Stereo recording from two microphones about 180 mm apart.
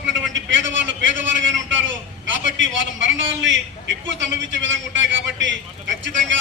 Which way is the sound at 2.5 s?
90° right.